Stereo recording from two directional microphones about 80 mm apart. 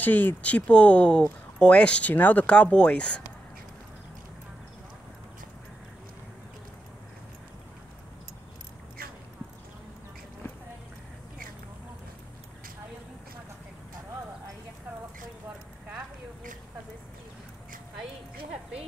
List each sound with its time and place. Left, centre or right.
0.0 s speech: left